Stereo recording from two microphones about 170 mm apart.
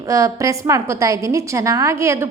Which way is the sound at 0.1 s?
20° right (ahead or behind).